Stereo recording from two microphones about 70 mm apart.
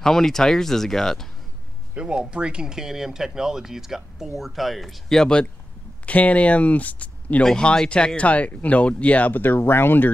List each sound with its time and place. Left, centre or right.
0.0 s speech: centre
2.0 s speech: centre; by 7.4 s left
7.4 s speech: centre; by 10.0 s left